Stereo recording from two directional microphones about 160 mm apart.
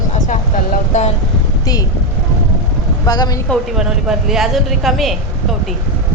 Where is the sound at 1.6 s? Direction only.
25° left (ahead or behind).